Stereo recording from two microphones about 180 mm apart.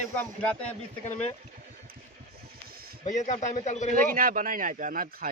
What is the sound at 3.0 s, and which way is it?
Speech, 40° left (ahead or behind).